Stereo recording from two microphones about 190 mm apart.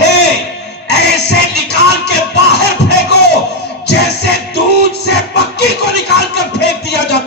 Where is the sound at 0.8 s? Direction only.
65° left (ahead or behind).